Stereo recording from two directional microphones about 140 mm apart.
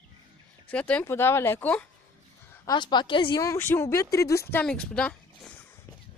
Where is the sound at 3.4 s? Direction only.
20° left (ahead or behind).